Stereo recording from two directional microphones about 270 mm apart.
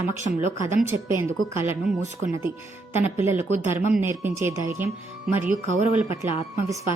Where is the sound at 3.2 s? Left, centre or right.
Centre.